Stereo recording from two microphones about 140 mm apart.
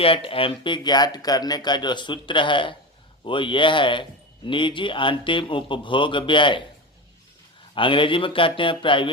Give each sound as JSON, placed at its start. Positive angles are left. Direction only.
{"t": 0.0, "sound": "speech", "side_deg": 40}
{"t": 7.8, "sound": "speech", "side_deg": 35}